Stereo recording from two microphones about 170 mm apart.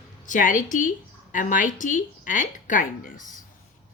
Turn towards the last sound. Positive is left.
turn(degrees=55)  # may be behind; listen again after turning